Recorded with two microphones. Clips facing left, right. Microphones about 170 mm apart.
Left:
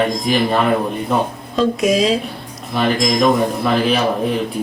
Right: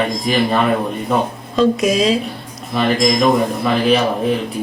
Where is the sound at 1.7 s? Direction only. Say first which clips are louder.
Even; centre (ahead or behind).